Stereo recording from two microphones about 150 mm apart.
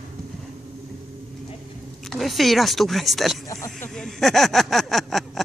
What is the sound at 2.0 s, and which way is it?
Speech, centre (ahead or behind).